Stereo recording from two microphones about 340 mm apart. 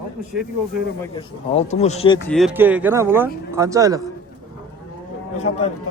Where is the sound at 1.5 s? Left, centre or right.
Centre.